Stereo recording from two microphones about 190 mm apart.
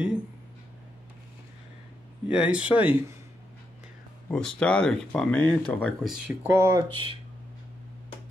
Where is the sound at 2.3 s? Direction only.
5° right (ahead or behind).